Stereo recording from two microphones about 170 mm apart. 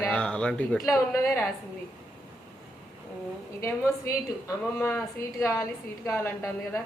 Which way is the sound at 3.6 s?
15° left (ahead or behind).